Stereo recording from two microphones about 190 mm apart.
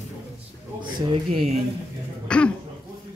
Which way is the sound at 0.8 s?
25° right (ahead or behind).